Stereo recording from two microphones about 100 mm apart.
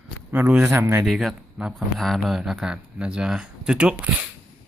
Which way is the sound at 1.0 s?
Centre (ahead or behind).